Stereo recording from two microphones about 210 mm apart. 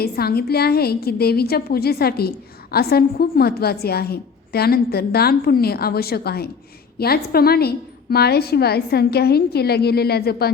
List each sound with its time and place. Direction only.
0.0 s a woman's voice: 50° left (ahead or behind)